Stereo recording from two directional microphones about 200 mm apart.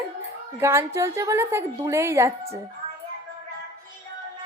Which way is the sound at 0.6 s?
15° right (ahead or behind).